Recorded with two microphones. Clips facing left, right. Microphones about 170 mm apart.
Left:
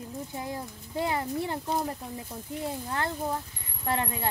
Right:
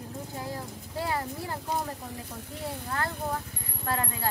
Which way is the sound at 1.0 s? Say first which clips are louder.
Left 3 dB; 20° left (ahead or behind).